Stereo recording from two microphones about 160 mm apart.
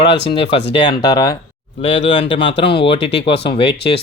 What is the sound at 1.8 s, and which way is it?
Speech, 35° left (ahead or behind).